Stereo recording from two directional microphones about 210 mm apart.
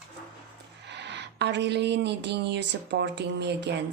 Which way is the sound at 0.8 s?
55° right (ahead or behind).